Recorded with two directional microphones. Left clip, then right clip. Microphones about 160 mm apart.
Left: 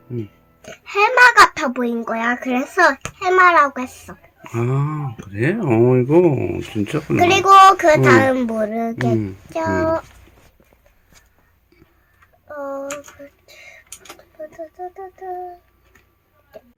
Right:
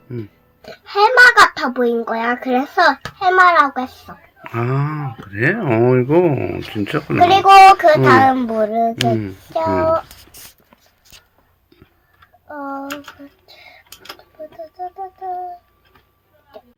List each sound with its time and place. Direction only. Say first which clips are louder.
0.7 s a child's voice: right 3 dB; 30° left (ahead or behind)
4.4 s speech: right 2 dB; 5° left (ahead or behind)
7.2 s a child's voice: right 3 dB; 25° left (ahead or behind)
12.5 s a sound: even; 25° left (ahead or behind)